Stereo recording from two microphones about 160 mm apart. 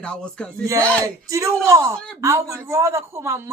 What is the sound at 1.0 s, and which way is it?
A man's voice, 20° right (ahead or behind).